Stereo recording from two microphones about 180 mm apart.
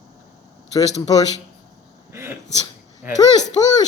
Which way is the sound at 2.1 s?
15° right (ahead or behind).